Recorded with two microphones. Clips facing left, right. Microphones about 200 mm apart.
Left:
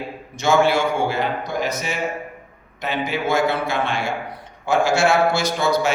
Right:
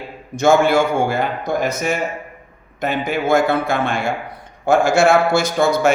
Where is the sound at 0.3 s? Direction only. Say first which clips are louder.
Right 4 dB; 50° right (ahead or behind).